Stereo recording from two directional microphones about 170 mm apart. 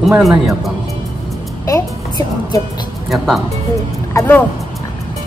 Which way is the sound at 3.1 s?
Centre (ahead or behind).